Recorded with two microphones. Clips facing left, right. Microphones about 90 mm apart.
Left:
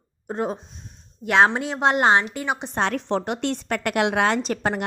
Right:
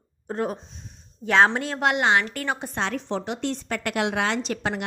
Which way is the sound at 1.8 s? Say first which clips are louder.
Left 3 dB; 40° left (ahead or behind).